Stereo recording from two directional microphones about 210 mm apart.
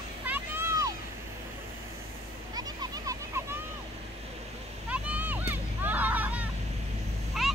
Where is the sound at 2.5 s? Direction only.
15° right (ahead or behind).